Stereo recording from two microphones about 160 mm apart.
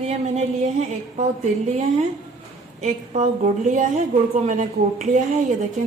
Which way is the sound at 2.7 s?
45° right (ahead or behind).